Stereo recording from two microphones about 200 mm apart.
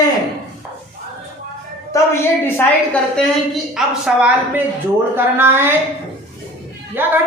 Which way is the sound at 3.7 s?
5° right (ahead or behind).